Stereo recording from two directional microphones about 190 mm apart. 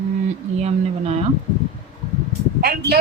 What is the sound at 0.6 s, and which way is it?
Speech, 35° right (ahead or behind).